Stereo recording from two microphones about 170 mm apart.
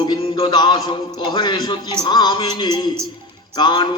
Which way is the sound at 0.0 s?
30° left (ahead or behind).